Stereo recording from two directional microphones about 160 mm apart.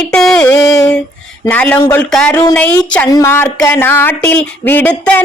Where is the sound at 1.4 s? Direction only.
10° left (ahead or behind).